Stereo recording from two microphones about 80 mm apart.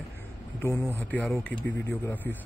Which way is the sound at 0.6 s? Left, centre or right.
Left.